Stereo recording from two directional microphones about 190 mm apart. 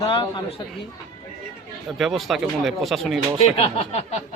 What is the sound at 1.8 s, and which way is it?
Speech, centre (ahead or behind).